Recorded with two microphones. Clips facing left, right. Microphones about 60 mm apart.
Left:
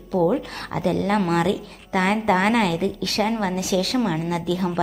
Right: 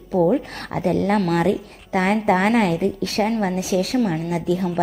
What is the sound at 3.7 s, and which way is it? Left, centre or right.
Speech, left.